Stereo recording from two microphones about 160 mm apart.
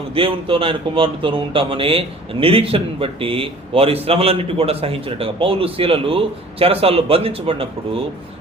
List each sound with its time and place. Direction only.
0.1 s a man's voice: 35° right (ahead or behind)